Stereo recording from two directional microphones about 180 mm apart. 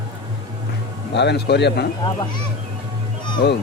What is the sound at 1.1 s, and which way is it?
Speech, 70° left (ahead or behind).